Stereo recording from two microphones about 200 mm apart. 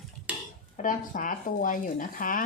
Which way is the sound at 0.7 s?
40° left (ahead or behind).